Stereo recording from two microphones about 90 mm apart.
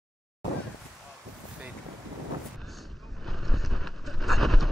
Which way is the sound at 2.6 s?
Centre (ahead or behind).